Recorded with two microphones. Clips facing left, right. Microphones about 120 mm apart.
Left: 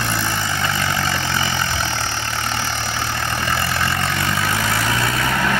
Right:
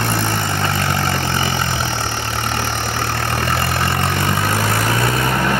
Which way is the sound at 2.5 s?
50° right (ahead or behind).